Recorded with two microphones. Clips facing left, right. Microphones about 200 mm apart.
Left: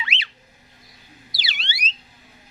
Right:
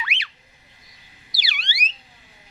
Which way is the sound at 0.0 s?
25° left (ahead or behind).